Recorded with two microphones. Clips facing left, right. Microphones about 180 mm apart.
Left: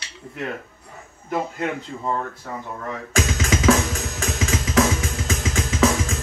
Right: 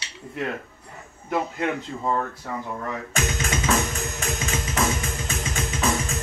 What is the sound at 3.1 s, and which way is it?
Music, 90° left.